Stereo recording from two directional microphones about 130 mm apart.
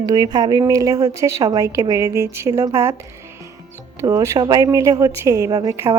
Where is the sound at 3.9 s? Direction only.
25° right (ahead or behind).